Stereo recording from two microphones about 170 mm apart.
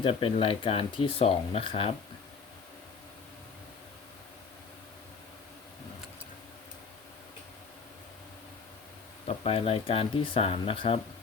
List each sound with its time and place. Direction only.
0.0 s speech: 35° left (ahead or behind)
9.2 s speech: 35° left (ahead or behind)